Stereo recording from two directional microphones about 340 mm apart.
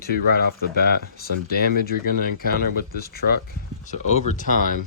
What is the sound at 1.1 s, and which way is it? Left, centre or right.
Speech, left.